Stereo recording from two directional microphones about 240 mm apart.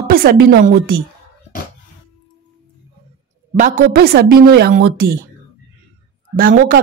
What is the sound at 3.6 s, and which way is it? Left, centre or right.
Speech, right.